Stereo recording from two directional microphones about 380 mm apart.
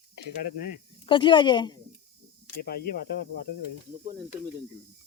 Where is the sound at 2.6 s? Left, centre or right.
Left.